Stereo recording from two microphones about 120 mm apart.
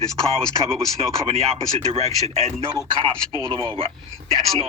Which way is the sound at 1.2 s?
60° right (ahead or behind).